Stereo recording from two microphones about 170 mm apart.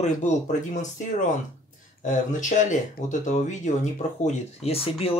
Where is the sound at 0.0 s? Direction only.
45° left (ahead or behind).